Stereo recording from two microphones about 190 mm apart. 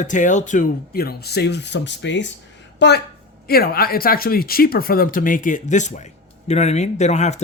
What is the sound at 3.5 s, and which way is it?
Speech, 55° left (ahead or behind).